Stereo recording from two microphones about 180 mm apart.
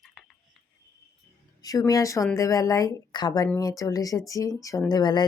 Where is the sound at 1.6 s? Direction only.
20° left (ahead or behind).